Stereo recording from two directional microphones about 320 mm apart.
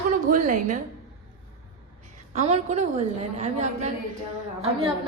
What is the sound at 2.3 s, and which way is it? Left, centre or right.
A woman's voice, centre.